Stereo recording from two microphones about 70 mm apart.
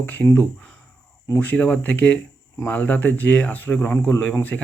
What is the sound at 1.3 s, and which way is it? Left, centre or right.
Speech, left.